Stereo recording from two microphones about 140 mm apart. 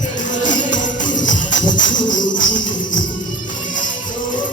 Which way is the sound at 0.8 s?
65° left (ahead or behind).